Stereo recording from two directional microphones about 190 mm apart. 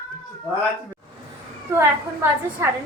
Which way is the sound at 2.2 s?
15° right (ahead or behind).